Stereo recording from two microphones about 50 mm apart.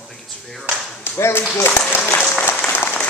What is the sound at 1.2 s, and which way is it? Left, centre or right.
Speech, left.